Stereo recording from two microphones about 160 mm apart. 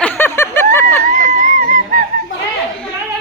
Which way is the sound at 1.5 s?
55° right (ahead or behind).